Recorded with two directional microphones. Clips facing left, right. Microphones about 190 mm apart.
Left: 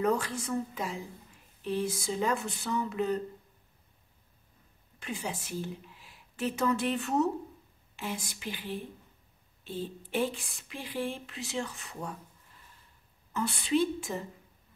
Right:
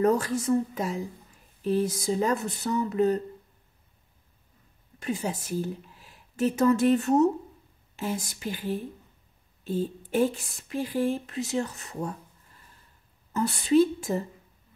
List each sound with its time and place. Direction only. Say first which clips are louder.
0.0 s speech: right 6 dB; 40° right (ahead or behind)
5.0 s speech: right 7 dB; 40° right (ahead or behind)
13.3 s speech: right 6 dB; 40° right (ahead or behind)